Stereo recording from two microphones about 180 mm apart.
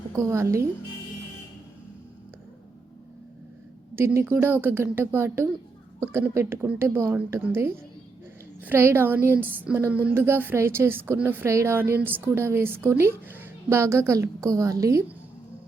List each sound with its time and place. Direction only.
0.2 s speech: 15° right (ahead or behind)
3.9 s speech: 15° right (ahead or behind)